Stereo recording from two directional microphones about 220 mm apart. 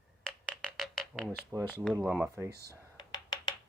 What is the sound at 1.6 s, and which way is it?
Speech, 10° left (ahead or behind).